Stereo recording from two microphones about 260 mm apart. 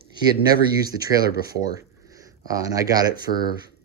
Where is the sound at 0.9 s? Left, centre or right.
Centre.